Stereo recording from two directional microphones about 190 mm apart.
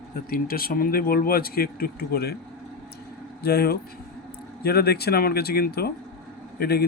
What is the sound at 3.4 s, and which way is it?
Speech, 55° left (ahead or behind).